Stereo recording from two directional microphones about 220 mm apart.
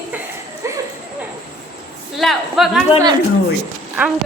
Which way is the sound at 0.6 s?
15° right (ahead or behind).